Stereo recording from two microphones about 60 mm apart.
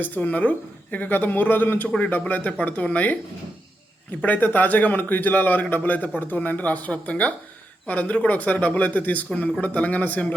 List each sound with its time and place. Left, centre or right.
0.0 s a man's voice: left
4.2 s a man's voice: left